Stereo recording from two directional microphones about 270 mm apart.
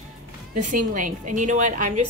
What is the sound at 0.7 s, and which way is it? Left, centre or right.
Speech, right.